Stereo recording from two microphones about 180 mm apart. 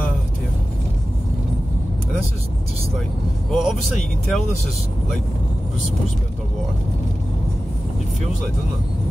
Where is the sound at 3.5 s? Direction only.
Centre (ahead or behind).